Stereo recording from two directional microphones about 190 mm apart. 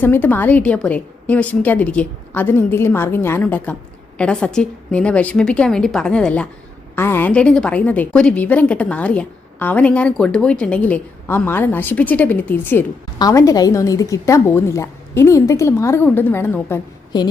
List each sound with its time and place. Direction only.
0.0 s a woman's voice: 10° left (ahead or behind)